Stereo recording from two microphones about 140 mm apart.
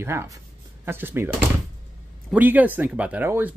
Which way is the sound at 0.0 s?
20° right (ahead or behind).